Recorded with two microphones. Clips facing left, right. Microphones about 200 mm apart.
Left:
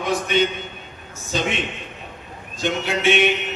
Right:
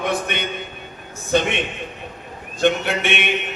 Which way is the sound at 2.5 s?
60° right (ahead or behind).